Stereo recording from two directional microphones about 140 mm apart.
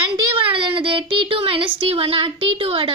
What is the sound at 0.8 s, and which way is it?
A woman's voice, 40° right (ahead or behind).